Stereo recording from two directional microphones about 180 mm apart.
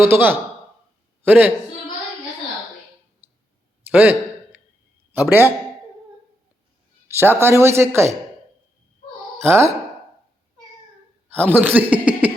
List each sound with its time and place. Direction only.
0.0 s speech: 10° right (ahead or behind)
3.2 s clicking: 10° right (ahead or behind)
3.8 s a sound: 10° right (ahead or behind)
5.1 s speech: 10° right (ahead or behind)
7.1 s speech: 10° right (ahead or behind)
9.5 s speech: 15° right (ahead or behind)
11.5 s speech: 10° right (ahead or behind)